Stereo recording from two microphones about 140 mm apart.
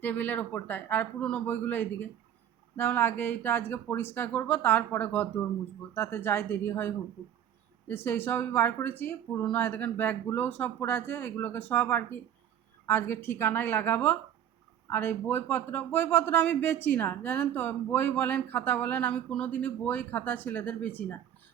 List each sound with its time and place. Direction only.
0.0 s speech: 10° left (ahead or behind)